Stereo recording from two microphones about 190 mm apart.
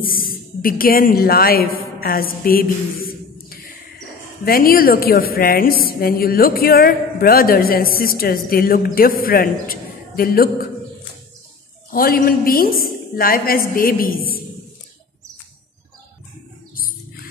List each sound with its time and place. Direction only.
0.0 s a woman's voice: 50° left (ahead or behind)
11.9 s a woman's voice: 50° left (ahead or behind)
16.7 s rodents: 50° left (ahead or behind)